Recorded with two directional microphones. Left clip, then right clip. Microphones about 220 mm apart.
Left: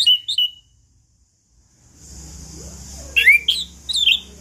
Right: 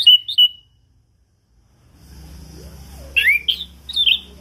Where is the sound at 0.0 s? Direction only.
5° left (ahead or behind).